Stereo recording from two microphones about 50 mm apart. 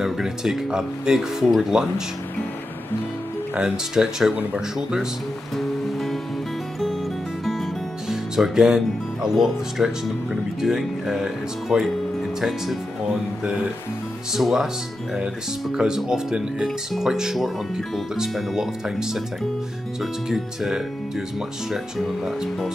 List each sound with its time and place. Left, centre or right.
0.0 s speech: centre
1.4 s speech: centre
1.7 s speech: centre
3.7 s speech: centre
5.6 s music: centre
8.1 s speech: centre
11.7 s speech: right
14.3 s speech: centre
15.7 s speech: centre
21.9 s speech: centre